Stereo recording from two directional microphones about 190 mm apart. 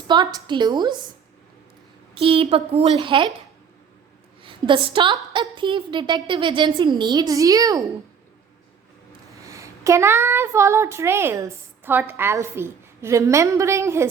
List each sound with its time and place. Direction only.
0.1 s a woman's voice: 20° right (ahead or behind)
2.1 s a woman's voice: 30° right (ahead or behind)
4.4 s a woman's voice: 25° right (ahead or behind)
9.5 s speech: 15° right (ahead or behind)